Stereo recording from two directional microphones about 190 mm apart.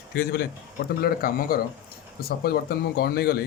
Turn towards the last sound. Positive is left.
turn(degrees=55)  # may be behind; listen again after turning